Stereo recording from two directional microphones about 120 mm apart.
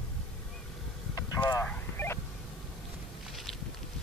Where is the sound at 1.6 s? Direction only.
15° left (ahead or behind).